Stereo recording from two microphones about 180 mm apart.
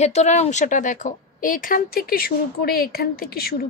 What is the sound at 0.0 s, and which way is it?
A woman's voice, 40° left (ahead or behind).